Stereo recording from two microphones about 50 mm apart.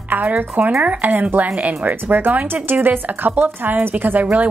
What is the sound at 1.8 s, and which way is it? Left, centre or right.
A woman's voice, right.